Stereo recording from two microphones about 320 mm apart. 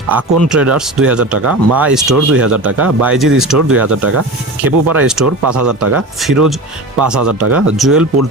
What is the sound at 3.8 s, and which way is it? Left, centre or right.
Speech, right.